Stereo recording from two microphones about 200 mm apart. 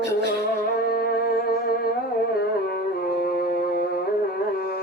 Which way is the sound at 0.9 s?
50° left (ahead or behind).